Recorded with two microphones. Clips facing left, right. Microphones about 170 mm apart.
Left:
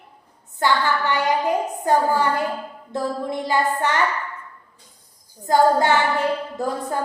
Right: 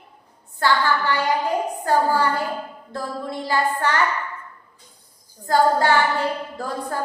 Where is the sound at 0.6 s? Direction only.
20° left (ahead or behind).